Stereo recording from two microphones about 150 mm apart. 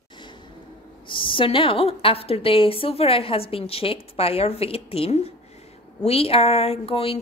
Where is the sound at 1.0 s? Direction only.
35° left (ahead or behind).